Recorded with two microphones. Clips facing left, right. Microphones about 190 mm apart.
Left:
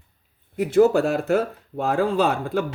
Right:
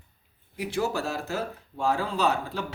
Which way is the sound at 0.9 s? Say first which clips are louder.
Left 10 dB; 60° left (ahead or behind).